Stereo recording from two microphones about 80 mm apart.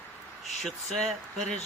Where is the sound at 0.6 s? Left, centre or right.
Centre.